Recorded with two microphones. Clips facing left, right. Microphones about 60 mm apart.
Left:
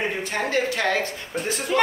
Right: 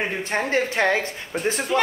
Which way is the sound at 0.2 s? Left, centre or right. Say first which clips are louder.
Right 1 dB; right.